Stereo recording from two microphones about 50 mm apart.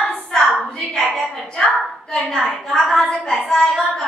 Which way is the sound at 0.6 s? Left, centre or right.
Centre.